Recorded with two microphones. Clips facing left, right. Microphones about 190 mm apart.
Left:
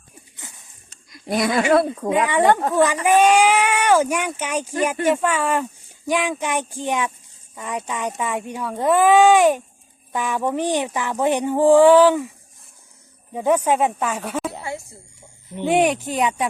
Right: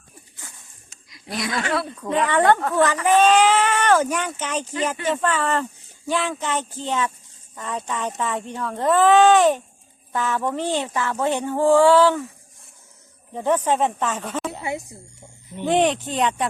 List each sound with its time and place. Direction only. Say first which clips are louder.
0.4 s a sound: left 3 dB; 20° left (ahead or behind)
1.1 s speech: left 7 dB; 50° left (ahead or behind)
2.0 s speech: right 3 dB; 10° left (ahead or behind)
13.3 s speech: left 2 dB; 10° left (ahead or behind)
14.6 s speech: right 2 dB; 20° right (ahead or behind)
15.5 s speech: left 1 dB; 10° left (ahead or behind)